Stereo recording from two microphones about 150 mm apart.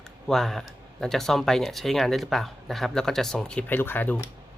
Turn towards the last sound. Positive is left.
turn(degrees=15)  # may be behind; listen again after turning